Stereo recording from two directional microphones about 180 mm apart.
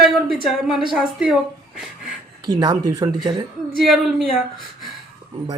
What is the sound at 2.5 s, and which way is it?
Speech, 25° right (ahead or behind).